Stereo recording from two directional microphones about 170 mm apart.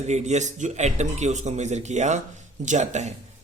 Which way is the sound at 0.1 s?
40° right (ahead or behind).